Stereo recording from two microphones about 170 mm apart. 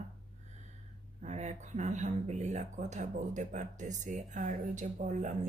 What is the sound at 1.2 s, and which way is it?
Speech, 40° right (ahead or behind).